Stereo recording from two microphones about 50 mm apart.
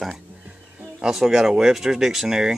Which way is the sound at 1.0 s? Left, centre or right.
Centre.